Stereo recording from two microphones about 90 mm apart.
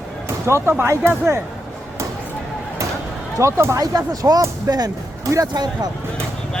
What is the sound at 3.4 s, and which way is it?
Speech, 30° right (ahead or behind).